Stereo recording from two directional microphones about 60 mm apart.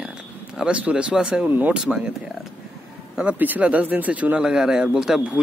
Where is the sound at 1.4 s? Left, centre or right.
Right.